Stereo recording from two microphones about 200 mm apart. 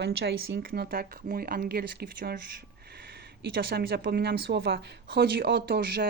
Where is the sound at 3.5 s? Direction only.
50° right (ahead or behind).